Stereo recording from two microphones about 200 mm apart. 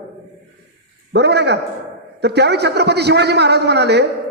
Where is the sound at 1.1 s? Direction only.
55° right (ahead or behind).